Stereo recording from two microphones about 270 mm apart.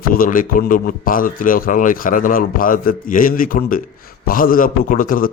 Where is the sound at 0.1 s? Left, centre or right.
Left.